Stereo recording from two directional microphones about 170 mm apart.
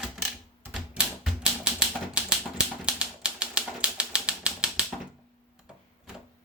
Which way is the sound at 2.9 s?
5° right (ahead or behind).